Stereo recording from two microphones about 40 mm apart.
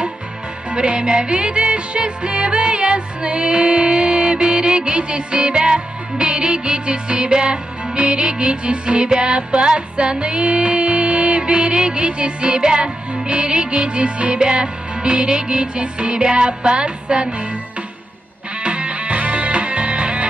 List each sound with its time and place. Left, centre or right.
0.7 s music: right
18.6 s music: right